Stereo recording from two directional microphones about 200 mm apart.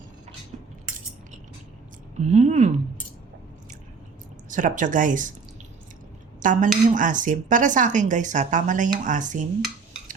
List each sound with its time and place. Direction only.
2.1 s speech: 35° right (ahead or behind)
4.4 s speech: 40° right (ahead or behind)
6.4 s a woman's voice: 40° right (ahead or behind)